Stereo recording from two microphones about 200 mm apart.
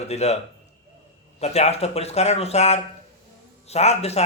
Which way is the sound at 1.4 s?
30° left (ahead or behind).